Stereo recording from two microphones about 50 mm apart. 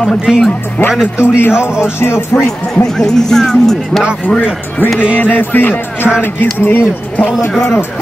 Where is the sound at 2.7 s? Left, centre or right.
Centre.